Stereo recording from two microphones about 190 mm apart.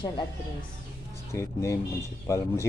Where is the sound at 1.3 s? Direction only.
15° left (ahead or behind).